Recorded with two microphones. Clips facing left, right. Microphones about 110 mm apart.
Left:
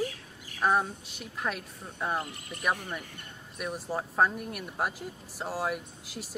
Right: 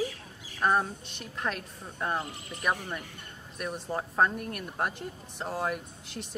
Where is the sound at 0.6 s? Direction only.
Centre (ahead or behind).